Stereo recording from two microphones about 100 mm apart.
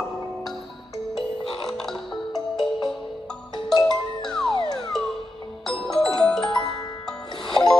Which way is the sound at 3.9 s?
5° left (ahead or behind).